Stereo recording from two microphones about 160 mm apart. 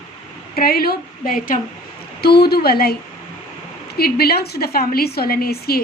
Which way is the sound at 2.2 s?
80° left.